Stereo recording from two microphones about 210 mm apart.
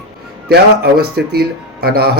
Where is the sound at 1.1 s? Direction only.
45° right (ahead or behind).